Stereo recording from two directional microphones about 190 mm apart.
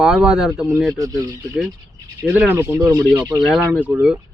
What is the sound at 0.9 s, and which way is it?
Speech, 15° right (ahead or behind).